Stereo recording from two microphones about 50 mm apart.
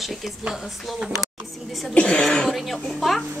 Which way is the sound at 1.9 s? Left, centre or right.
Left.